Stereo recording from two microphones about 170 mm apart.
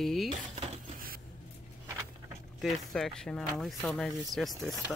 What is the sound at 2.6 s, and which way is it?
Speech, 5° left (ahead or behind).